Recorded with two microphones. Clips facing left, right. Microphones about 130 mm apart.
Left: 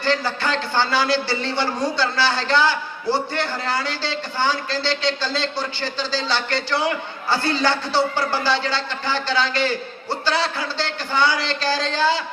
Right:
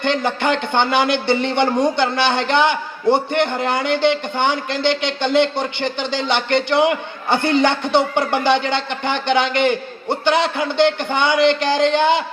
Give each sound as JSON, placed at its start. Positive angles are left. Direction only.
{"t": 0.0, "sound": "a man's voice", "side_deg": -20}